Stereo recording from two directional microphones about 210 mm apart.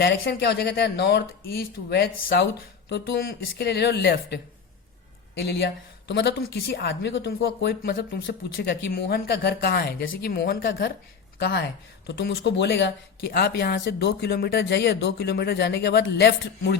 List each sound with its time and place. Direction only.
0.0 s speech: 55° left (ahead or behind)